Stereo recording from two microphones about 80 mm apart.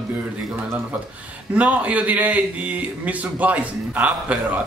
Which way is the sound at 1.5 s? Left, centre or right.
Centre.